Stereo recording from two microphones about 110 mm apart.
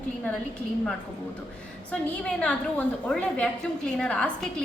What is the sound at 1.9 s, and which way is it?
A woman's voice, 10° left (ahead or behind).